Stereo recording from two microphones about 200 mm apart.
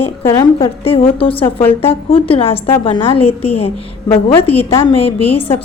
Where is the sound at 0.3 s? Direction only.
25° left (ahead or behind).